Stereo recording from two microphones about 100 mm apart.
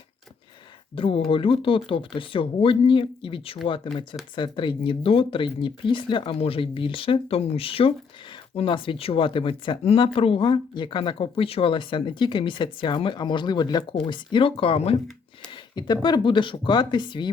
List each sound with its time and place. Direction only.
0.9 s speech: 60° left (ahead or behind)
4.4 s speech: 50° left (ahead or behind)
13.9 s speech: 55° left (ahead or behind)
15.7 s speech: 45° left (ahead or behind)